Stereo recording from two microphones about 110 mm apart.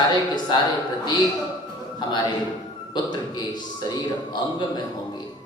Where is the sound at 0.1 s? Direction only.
40° left (ahead or behind).